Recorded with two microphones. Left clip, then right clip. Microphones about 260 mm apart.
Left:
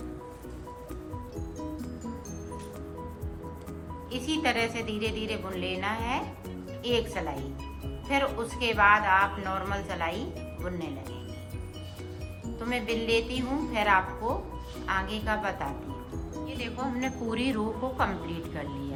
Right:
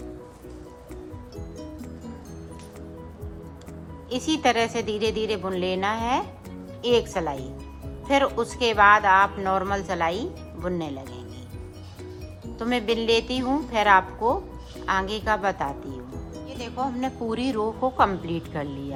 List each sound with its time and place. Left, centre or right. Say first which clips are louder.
4.1 s a woman's voice: right 6 dB; right
12.5 s a woman's voice: right 6 dB; centre